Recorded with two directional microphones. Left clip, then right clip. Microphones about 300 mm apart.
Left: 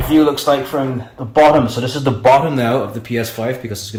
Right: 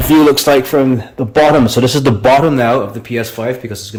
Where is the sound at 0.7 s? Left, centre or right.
Right.